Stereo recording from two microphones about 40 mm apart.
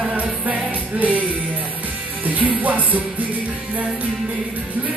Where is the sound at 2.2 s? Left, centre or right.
Right.